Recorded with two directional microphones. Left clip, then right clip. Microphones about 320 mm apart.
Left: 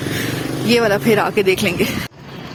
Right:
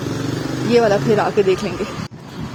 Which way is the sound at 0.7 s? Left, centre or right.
Centre.